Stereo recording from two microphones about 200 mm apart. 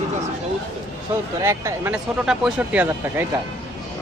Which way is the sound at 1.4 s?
15° right (ahead or behind).